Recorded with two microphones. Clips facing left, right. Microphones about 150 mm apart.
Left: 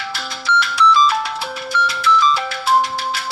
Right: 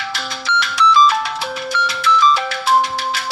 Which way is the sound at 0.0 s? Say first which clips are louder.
Right 1 dB; 90° right.